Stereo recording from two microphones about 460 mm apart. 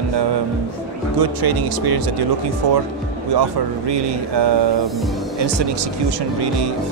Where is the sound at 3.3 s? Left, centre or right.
Right.